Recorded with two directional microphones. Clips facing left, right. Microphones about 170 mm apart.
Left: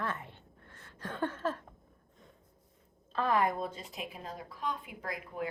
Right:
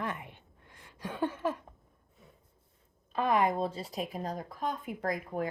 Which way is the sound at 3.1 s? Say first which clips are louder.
Right 2 dB; 15° right (ahead or behind).